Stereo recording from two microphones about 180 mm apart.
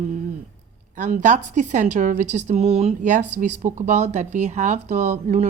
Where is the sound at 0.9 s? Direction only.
45° right (ahead or behind).